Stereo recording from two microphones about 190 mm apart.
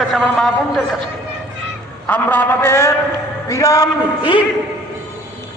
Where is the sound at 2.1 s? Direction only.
10° left (ahead or behind).